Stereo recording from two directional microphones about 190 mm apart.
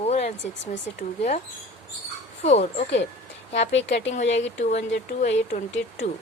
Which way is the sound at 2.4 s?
35° left (ahead or behind).